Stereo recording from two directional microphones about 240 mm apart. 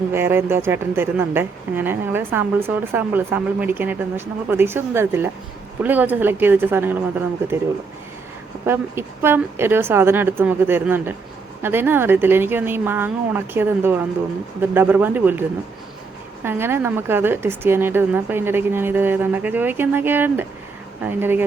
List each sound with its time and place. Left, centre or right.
0.1 s a woman's voice: centre
8.6 s a woman's voice: centre